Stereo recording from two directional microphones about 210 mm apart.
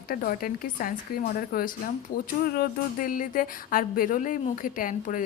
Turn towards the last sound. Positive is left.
turn(degrees=40)  # may be behind; listen again after turning